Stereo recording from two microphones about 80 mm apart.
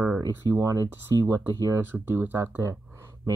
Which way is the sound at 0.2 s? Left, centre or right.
Right.